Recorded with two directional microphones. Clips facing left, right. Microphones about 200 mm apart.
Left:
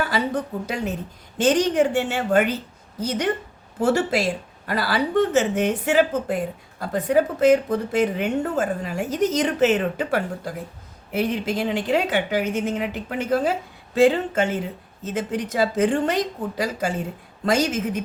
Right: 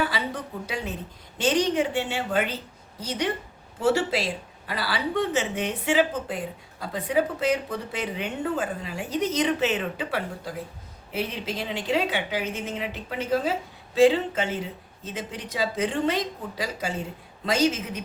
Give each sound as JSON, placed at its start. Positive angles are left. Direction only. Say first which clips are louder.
{"t": 0.0, "sound": "a woman's voice", "louder": "left 5 dB", "side_deg": 45}